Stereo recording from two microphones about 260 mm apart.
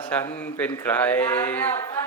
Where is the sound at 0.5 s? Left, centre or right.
Centre.